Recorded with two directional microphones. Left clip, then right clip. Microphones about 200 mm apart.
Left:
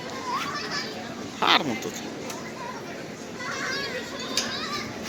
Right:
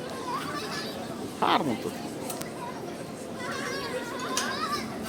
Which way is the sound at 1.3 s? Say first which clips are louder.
Left 4 dB; 10° right (ahead or behind).